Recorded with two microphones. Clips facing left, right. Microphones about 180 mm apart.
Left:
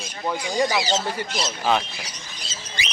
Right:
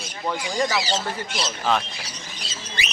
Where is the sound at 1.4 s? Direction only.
5° left (ahead or behind).